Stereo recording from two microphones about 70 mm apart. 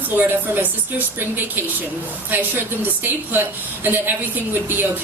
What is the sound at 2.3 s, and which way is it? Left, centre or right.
A woman's voice, right.